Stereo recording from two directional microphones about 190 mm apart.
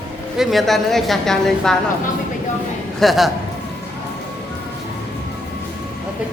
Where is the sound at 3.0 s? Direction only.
Centre (ahead or behind).